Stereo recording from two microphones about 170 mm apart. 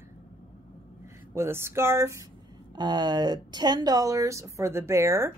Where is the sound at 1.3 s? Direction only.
15° right (ahead or behind).